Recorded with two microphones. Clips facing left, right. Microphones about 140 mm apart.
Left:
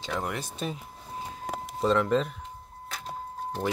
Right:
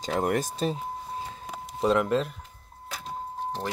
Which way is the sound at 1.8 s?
10° right (ahead or behind).